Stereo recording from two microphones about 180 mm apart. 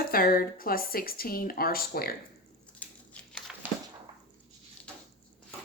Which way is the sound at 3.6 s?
10° right (ahead or behind).